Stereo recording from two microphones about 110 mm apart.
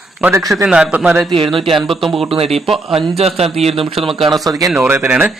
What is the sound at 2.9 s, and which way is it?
Speech, 70° right (ahead or behind).